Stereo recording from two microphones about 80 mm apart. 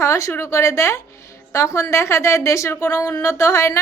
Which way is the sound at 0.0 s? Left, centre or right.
Left.